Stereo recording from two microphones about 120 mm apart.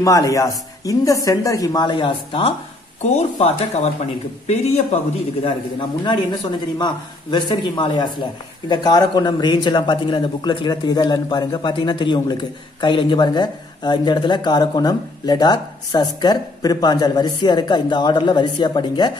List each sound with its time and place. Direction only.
0.0 s speech: 30° left (ahead or behind); by 2.5 s 45° left (ahead or behind)
3.0 s speech: 70° left (ahead or behind)
5.4 s a man's voice: 50° left (ahead or behind)